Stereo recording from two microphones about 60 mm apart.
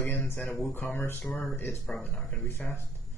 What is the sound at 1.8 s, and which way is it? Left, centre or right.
Speech, left.